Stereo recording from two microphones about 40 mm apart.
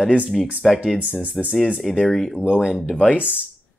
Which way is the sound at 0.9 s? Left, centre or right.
Right.